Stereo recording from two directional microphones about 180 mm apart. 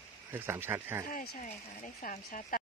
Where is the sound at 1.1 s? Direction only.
45° left (ahead or behind).